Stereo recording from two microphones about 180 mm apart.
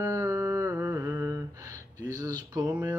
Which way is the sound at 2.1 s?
20° right (ahead or behind).